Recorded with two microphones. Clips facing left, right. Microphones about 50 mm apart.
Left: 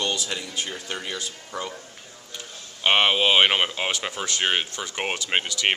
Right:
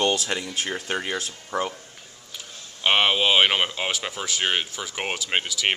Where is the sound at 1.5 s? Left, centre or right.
Right.